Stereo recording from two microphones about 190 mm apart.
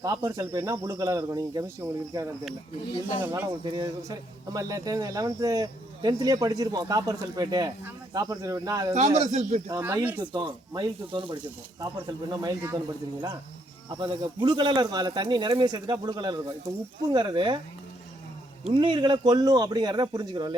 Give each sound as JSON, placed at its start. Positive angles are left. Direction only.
{"t": 0.0, "sound": "a man's voice", "side_deg": -20}
{"t": 3.6, "sound": "a man's voice", "side_deg": -20}
{"t": 9.1, "sound": "speech", "side_deg": -35}
{"t": 9.6, "sound": "speech", "side_deg": -15}
{"t": 10.3, "sound": "a man's voice", "side_deg": -25}
{"t": 13.9, "sound": "a man's voice", "side_deg": -20}
{"t": 18.7, "sound": "a man's voice", "side_deg": -25}